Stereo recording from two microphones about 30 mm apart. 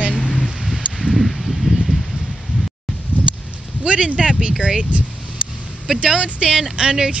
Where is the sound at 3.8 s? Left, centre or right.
Right.